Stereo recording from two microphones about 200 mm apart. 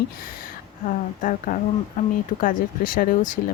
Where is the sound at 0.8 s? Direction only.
40° left (ahead or behind).